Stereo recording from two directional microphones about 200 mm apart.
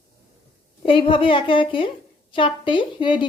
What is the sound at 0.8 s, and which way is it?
A woman's voice, 25° left (ahead or behind).